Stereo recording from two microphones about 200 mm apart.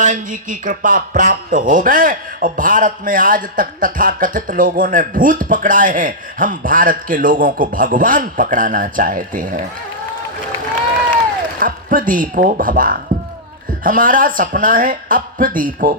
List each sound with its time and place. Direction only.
0.0 s speech: 40° right (ahead or behind)
11.6 s speech: 45° right (ahead or behind)